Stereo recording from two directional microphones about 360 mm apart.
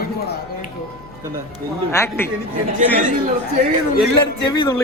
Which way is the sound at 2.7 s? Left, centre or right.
Right.